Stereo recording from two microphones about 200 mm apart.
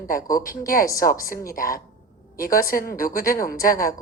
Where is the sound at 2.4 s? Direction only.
45° left (ahead or behind).